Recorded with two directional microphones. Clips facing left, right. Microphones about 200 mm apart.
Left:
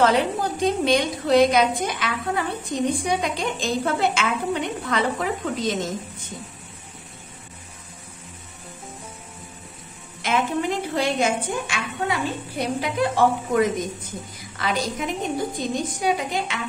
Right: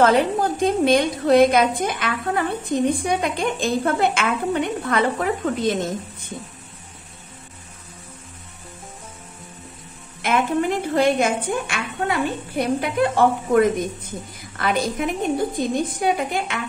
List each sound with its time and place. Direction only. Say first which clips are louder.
0.0 s a woman's voice: right 3 dB; 50° right (ahead or behind)
10.2 s a woman's voice: right 3 dB; 55° right (ahead or behind)